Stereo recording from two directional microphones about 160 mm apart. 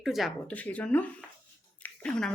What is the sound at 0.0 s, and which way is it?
Speech, centre (ahead or behind).